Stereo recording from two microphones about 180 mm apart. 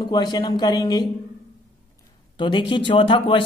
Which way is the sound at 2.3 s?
25° left (ahead or behind).